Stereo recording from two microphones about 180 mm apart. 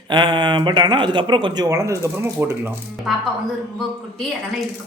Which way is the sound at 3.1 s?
Centre (ahead or behind).